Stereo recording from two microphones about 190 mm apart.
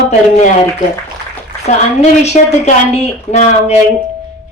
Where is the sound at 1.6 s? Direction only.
35° left (ahead or behind).